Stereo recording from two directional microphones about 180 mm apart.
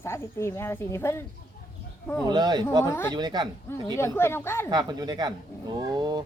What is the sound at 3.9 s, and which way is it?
Speech, 15° left (ahead or behind).